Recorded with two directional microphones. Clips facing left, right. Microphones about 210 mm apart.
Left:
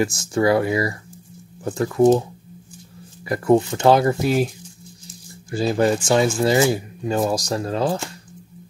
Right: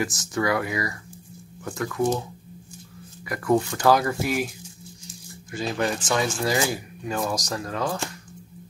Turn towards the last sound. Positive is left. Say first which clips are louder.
# left 6 dB
turn(degrees=30)  # may be behind; listen again after turning